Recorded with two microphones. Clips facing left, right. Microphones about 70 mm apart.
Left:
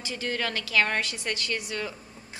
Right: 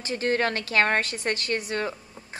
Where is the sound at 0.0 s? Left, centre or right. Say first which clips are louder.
Right 6 dB; right.